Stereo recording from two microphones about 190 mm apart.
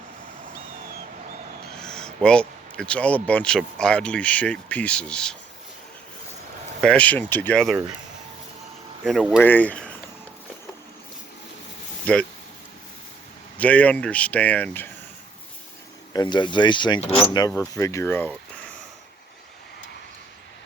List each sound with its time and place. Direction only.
1.8 s a sound: 5° left (ahead or behind)
3.2 s speech: 5° left (ahead or behind)
6.8 s speech: 5° left (ahead or behind)
9.0 s speech: centre (ahead or behind)
9.4 s speech: 10° left (ahead or behind)
12.1 s speech: 5° left (ahead or behind)
13.6 s speech: 5° left (ahead or behind)
16.1 s mechanisms: 25° left (ahead or behind)
17.3 s speech: 15° left (ahead or behind)